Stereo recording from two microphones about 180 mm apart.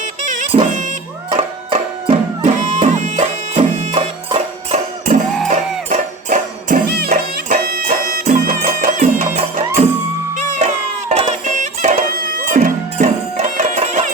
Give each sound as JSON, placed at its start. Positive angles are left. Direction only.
{"t": 0.0, "sound": "music", "side_deg": -45}
{"t": 1.3, "sound": "music", "side_deg": -30}